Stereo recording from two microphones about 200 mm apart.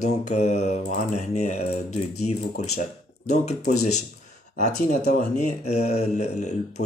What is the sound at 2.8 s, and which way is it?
Speech, 35° left (ahead or behind).